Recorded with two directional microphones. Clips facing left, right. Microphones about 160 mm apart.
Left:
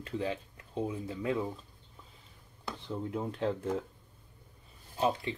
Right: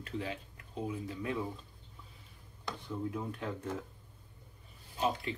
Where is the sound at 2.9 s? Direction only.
25° left (ahead or behind).